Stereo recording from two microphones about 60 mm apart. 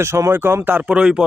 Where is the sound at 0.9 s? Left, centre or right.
Centre.